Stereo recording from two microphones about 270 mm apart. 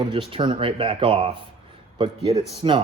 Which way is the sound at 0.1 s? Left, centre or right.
Centre.